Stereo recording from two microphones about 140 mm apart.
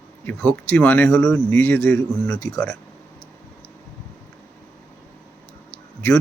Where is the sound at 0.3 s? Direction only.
5° left (ahead or behind).